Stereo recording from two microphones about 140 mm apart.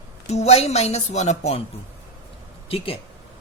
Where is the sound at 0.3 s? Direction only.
50° left (ahead or behind).